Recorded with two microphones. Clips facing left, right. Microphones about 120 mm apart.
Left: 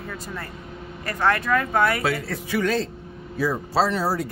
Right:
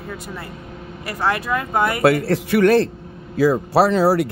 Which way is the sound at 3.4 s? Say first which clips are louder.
Right 7 dB; 80° right.